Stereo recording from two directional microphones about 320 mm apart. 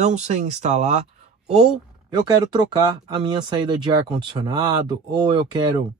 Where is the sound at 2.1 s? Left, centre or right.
Centre.